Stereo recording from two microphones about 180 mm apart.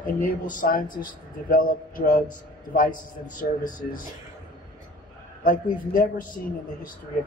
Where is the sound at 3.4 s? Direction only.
50° left (ahead or behind).